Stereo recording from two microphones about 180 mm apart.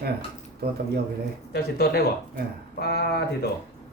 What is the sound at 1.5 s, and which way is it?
Speech, 60° left (ahead or behind).